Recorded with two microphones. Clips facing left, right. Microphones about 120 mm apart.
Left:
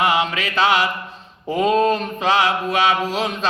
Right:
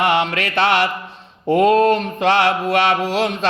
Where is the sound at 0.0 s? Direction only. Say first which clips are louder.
Right 2 dB; 65° right (ahead or behind).